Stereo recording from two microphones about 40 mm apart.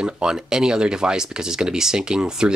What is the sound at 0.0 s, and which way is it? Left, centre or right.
Speech, centre.